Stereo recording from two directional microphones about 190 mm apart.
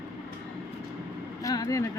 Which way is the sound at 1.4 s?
20° left (ahead or behind).